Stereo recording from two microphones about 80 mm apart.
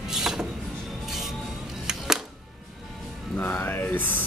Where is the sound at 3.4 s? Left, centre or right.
Left.